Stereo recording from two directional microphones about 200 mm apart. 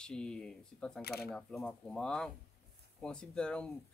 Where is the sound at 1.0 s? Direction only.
50° left (ahead or behind).